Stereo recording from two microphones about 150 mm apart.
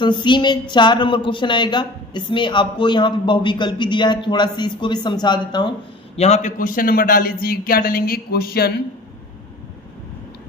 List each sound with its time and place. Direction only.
0.0 s a woman's voice: 30° left (ahead or behind)
6.1 s a man's voice: 45° left (ahead or behind)
6.6 s speech: 70° left (ahead or behind); by 8.7 s 90° left